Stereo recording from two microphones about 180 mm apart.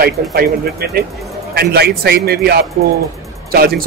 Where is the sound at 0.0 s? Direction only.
60° right (ahead or behind).